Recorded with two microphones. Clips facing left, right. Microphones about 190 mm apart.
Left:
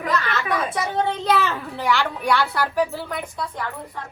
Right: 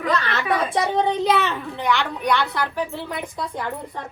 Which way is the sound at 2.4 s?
5° left (ahead or behind).